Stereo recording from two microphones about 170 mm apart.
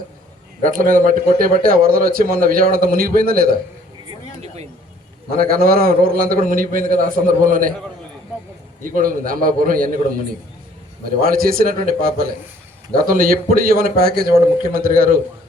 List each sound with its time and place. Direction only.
0.6 s a man's voice: 55° right (ahead or behind)
4.4 s a sound: 40° right (ahead or behind)
5.4 s a man's voice: 60° right (ahead or behind)
8.8 s a man's voice: 55° right (ahead or behind)
11.0 s a man's voice: 60° right (ahead or behind)